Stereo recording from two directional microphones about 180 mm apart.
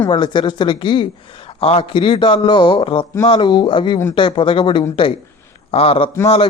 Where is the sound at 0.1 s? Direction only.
25° left (ahead or behind).